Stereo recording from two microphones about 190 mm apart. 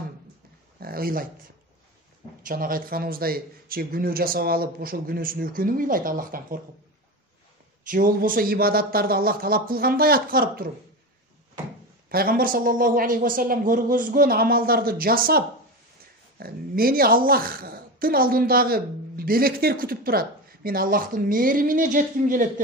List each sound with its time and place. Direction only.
0.7 s a sound: 50° right (ahead or behind)
2.4 s speech: 50° right (ahead or behind)
7.9 s speech: 45° right (ahead or behind)
12.1 s speech: 50° right (ahead or behind)